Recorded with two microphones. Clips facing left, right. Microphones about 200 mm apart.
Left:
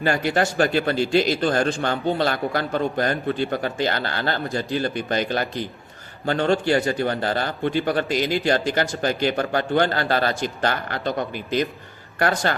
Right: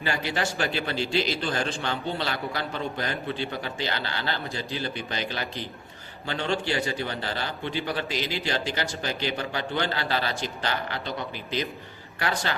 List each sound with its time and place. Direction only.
0.0 s a man's voice: 50° left (ahead or behind)